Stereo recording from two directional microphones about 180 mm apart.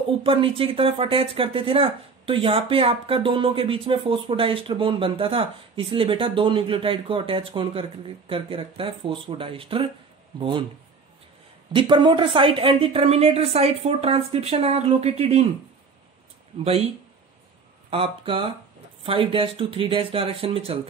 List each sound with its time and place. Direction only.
0.2 s speech: 30° right (ahead or behind)
11.7 s a woman's voice: 25° right (ahead or behind)
17.8 s a woman's voice: 30° right (ahead or behind)